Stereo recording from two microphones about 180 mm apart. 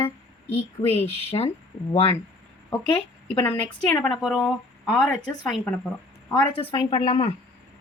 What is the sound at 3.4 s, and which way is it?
Speech, 10° left (ahead or behind).